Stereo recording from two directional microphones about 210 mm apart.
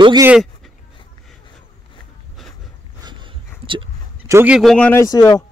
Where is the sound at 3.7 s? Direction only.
25° right (ahead or behind).